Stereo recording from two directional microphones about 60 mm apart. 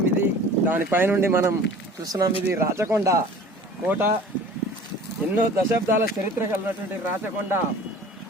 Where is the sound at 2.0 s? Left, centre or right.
Right.